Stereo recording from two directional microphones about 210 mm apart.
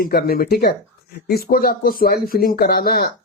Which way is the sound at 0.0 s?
45° left (ahead or behind).